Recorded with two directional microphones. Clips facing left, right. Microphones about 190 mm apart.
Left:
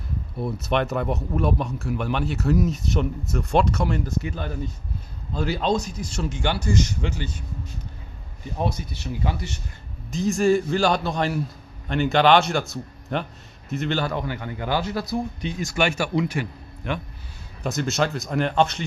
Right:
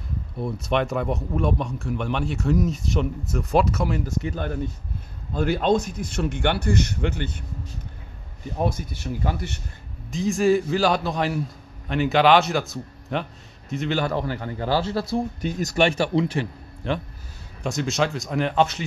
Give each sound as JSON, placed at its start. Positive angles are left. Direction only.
{"t": 0.4, "sound": "a man's voice", "side_deg": 5}
{"t": 4.3, "sound": "speech", "side_deg": -55}
{"t": 8.5, "sound": "speech", "side_deg": -50}
{"t": 10.1, "sound": "a man's voice", "side_deg": 0}
{"t": 14.0, "sound": "a man's voice", "side_deg": -35}
{"t": 15.4, "sound": "a man's voice", "side_deg": -40}
{"t": 16.0, "sound": "a man's voice", "side_deg": -30}
{"t": 17.6, "sound": "a man's voice", "side_deg": 0}